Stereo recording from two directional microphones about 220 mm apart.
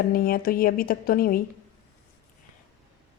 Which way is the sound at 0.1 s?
40° left (ahead or behind).